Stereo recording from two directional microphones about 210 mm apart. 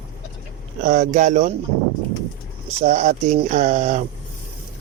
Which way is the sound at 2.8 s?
35° right (ahead or behind).